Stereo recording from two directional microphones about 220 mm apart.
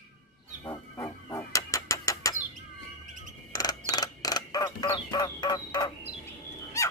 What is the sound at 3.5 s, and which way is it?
Bird, 15° left (ahead or behind).